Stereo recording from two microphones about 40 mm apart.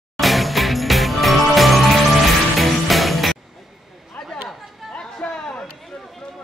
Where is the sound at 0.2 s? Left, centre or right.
Centre.